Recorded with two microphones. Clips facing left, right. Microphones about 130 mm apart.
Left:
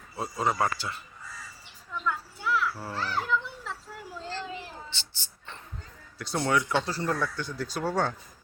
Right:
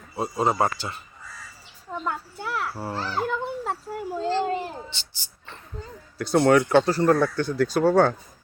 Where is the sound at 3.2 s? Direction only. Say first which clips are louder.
Right 4 dB; 50° right (ahead or behind).